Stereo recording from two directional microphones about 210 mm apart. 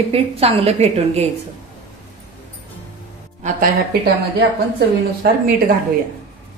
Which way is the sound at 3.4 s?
40° right (ahead or behind).